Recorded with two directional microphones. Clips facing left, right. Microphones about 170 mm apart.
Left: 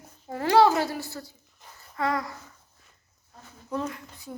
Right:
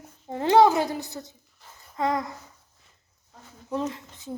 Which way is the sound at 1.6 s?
20° left (ahead or behind).